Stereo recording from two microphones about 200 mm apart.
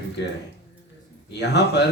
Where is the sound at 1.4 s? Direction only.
60° left (ahead or behind).